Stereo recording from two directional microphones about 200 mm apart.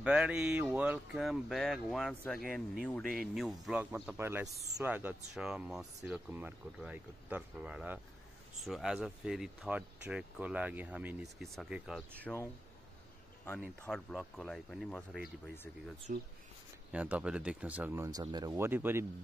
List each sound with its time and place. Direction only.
0.0 s speech: 5° right (ahead or behind)
13.7 s speech: 5° left (ahead or behind)
16.1 s speech: 40° right (ahead or behind)
16.9 s speech: 5° right (ahead or behind)